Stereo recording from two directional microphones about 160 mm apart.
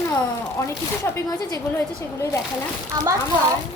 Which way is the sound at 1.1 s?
20° left (ahead or behind).